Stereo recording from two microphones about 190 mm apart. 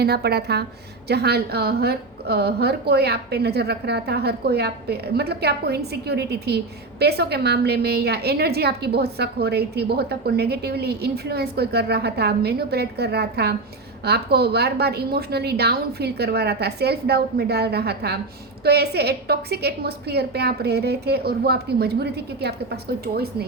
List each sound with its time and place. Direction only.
0.0 s a woman's voice: 55° right (ahead or behind)